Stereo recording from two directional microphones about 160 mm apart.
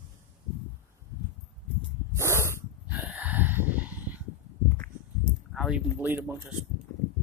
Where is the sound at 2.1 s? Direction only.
15° right (ahead or behind).